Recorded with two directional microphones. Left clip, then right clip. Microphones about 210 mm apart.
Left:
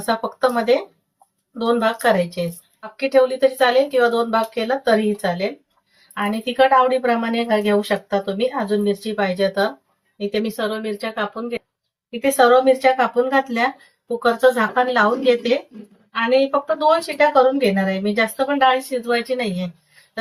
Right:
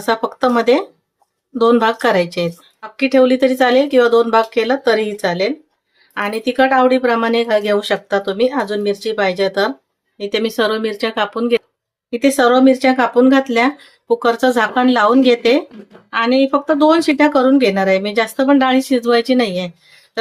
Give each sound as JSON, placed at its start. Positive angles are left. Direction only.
{"t": 0.0, "sound": "speech", "side_deg": -50}